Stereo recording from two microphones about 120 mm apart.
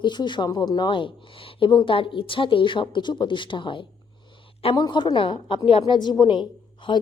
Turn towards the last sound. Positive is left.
turn(degrees=40)  # may be behind; listen again after turning